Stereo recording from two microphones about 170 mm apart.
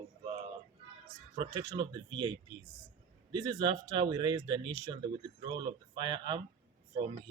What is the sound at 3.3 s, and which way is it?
Speech, 25° right (ahead or behind).